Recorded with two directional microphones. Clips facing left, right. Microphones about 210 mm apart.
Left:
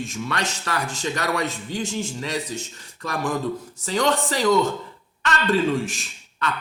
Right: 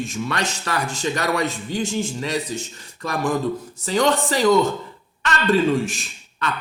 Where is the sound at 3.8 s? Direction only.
15° right (ahead or behind).